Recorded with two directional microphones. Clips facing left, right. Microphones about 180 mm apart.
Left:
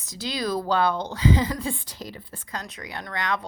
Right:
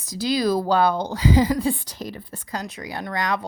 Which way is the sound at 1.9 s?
50° right (ahead or behind).